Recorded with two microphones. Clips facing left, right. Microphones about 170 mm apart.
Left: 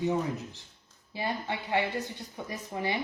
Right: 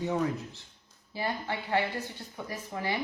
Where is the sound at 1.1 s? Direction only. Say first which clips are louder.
Even; 20° left (ahead or behind).